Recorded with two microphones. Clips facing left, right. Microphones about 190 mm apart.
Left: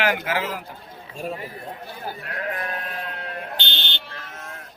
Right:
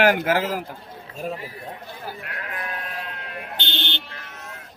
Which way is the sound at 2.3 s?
40° left (ahead or behind).